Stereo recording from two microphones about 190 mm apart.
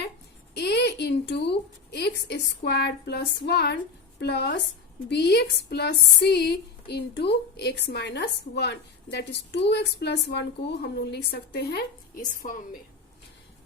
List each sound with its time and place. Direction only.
0.5 s a woman's voice: 60° left (ahead or behind)
12.4 s a woman's voice: 45° left (ahead or behind)